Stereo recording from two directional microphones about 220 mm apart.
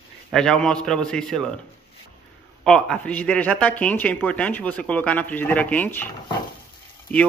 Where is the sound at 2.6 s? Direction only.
5° left (ahead or behind).